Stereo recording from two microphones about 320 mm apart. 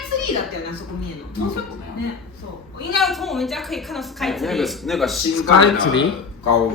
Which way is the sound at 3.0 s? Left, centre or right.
Centre.